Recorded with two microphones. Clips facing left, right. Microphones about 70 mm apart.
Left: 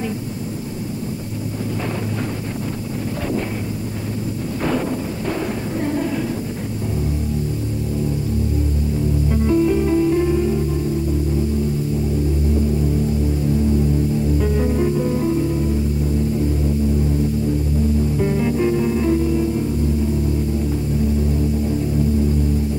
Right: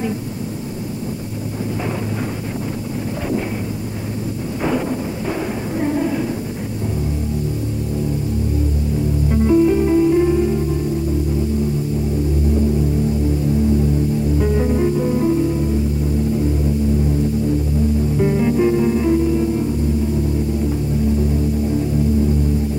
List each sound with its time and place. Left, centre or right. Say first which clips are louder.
5.8 s a sound: right 3 dB; centre
9.3 s music: right 3 dB; centre
14.4 s music: right 2 dB; centre
18.1 s music: right 3 dB; centre